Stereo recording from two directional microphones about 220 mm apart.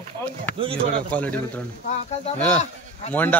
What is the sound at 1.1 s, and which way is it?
Speech, 5° left (ahead or behind).